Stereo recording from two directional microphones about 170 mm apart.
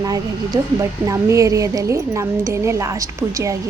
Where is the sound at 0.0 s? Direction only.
20° right (ahead or behind).